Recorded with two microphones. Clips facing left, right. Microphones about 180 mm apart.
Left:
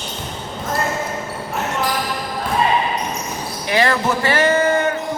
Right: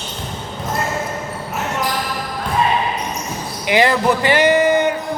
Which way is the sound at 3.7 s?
20° right (ahead or behind).